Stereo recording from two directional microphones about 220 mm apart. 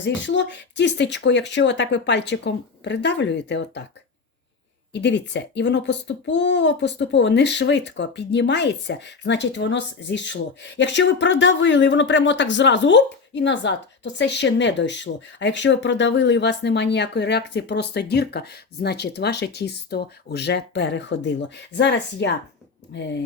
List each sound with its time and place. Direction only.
0.0 s a child's voice: 55° left (ahead or behind)
4.9 s a child's voice: 50° left (ahead or behind)